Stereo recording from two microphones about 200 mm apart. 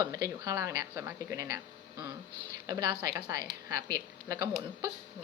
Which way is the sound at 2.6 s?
20° right (ahead or behind).